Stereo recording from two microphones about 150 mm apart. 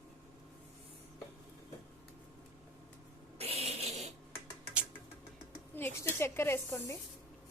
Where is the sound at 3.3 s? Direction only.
45° right (ahead or behind).